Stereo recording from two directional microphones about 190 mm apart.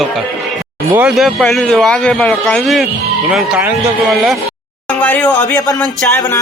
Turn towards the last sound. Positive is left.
turn(degrees=15)  # may be behind; listen again after turning